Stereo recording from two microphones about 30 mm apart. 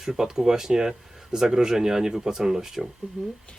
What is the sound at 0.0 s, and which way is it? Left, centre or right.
Speech, centre.